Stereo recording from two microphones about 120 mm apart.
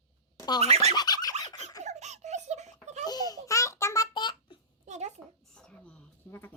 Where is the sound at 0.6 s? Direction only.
65° right (ahead or behind).